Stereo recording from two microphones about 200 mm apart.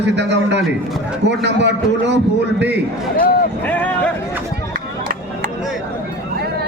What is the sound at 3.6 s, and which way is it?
Speech, 10° left (ahead or behind).